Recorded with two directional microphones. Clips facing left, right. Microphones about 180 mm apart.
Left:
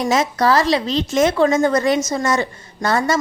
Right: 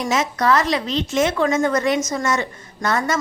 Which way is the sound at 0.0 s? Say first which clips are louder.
Left 3 dB; 35° left (ahead or behind).